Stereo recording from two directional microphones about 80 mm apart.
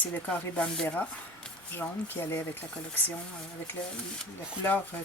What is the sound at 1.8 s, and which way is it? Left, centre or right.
Speech, left.